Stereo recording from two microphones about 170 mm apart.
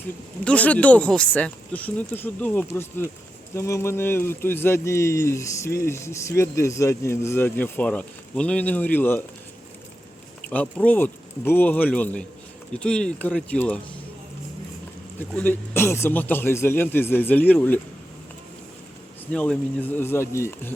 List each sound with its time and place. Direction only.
0.4 s speech: 10° left (ahead or behind)
10.5 s speech: 10° left (ahead or behind)
15.2 s speech: 10° left (ahead or behind)
19.3 s speech: 5° left (ahead or behind)